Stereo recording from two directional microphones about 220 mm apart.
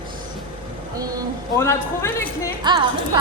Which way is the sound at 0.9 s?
15° right (ahead or behind).